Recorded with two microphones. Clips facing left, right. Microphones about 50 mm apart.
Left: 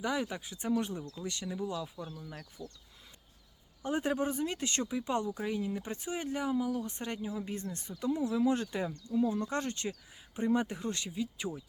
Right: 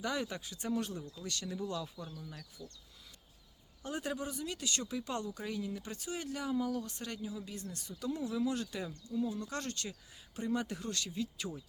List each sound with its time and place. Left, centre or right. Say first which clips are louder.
0.0 s speech: left 3 dB; centre
3.8 s speech: left 7 dB; left
4.9 s speech: left 5 dB; centre
6.6 s speech: left 2 dB; centre
6.8 s speech: left 4 dB; left